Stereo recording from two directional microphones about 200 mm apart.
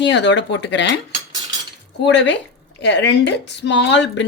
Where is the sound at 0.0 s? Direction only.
60° left (ahead or behind).